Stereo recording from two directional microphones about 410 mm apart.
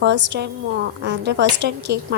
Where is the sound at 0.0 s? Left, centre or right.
Right.